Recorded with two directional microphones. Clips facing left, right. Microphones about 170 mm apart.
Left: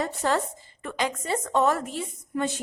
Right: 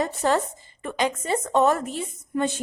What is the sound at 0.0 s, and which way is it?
A woman's voice, 20° right (ahead or behind).